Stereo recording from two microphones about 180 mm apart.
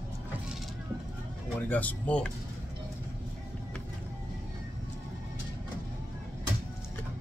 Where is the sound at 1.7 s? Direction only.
10° left (ahead or behind).